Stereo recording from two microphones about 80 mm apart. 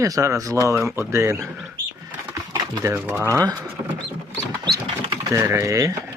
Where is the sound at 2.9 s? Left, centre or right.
Right.